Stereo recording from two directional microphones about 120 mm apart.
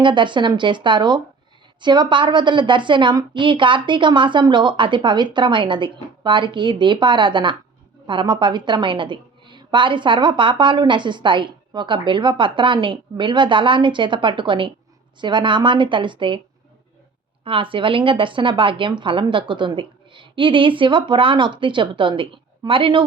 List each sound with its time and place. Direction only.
0.0 s a woman's voice: 40° right (ahead or behind)
17.4 s a woman's voice: 50° right (ahead or behind)